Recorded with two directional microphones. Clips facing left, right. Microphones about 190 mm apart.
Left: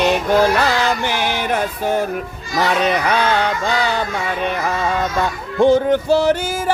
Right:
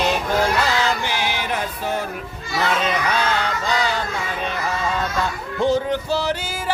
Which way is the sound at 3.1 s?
60° left (ahead or behind).